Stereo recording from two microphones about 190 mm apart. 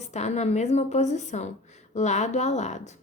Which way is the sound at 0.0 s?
35° left (ahead or behind).